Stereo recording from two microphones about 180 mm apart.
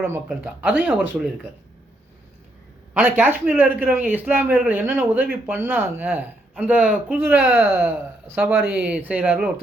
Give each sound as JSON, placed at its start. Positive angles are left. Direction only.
{"t": 0.0, "sound": "a man's voice", "side_deg": -10}
{"t": 2.9, "sound": "a man's voice", "side_deg": -10}